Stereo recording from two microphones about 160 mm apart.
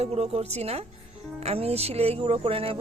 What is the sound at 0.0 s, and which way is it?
Speech, 40° right (ahead or behind).